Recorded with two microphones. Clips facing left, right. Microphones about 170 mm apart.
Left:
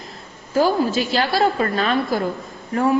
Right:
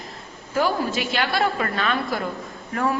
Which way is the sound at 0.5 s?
30° left (ahead or behind).